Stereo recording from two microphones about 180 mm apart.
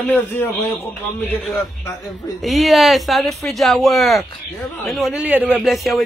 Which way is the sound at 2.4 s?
Centre (ahead or behind).